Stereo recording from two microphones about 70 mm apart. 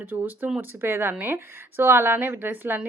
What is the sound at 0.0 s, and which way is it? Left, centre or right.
A woman's voice, right.